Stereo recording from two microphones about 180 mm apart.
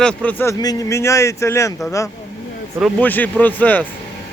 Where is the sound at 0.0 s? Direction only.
5° left (ahead or behind).